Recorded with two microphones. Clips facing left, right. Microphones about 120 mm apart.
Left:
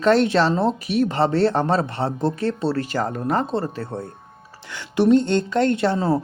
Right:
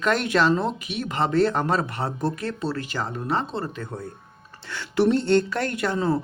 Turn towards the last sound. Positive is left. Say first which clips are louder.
# left 4 dB
turn(degrees=35)  # may be behind; listen again after turning